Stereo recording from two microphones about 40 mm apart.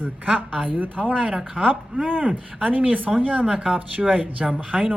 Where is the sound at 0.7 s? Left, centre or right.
Right.